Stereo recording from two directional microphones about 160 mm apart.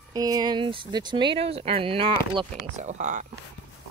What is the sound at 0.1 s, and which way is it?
Speech, 25° right (ahead or behind).